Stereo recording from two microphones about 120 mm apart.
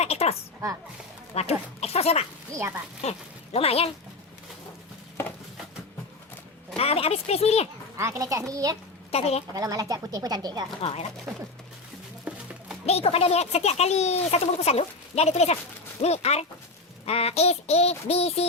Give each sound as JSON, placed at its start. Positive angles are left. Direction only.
{"t": 0.0, "sound": "a sound", "side_deg": 60}
{"t": 1.3, "sound": "a child's voice", "side_deg": 60}
{"t": 2.5, "sound": "a child's voice", "side_deg": -20}
{"t": 3.0, "sound": "a child's voice", "side_deg": 60}
{"t": 6.7, "sound": "a child's voice", "side_deg": 55}
{"t": 7.9, "sound": "a child's voice", "side_deg": -25}
{"t": 9.1, "sound": "a child's voice", "side_deg": 60}
{"t": 9.5, "sound": "speech", "side_deg": -30}
{"t": 10.8, "sound": "speech", "side_deg": 55}
{"t": 12.3, "sound": "music", "side_deg": -10}
{"t": 12.8, "sound": "a child's voice", "side_deg": 60}